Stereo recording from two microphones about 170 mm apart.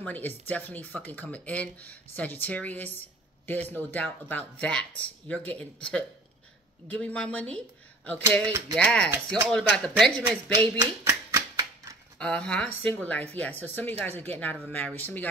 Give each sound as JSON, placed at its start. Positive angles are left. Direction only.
{"t": 0.0, "sound": "a man's voice", "side_deg": 10}
{"t": 11.1, "sound": "typewriter", "side_deg": -15}
{"t": 12.2, "sound": "speech", "side_deg": 5}